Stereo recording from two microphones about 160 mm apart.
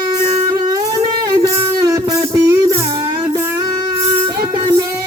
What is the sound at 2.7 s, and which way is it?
Music, 35° right (ahead or behind).